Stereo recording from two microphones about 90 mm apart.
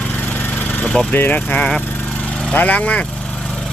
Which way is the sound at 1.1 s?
20° left (ahead or behind).